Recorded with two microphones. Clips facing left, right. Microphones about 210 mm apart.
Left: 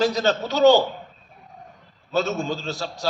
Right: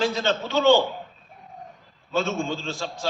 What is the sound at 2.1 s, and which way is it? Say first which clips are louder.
Speech: left 2 dB; 40° left (ahead or behind).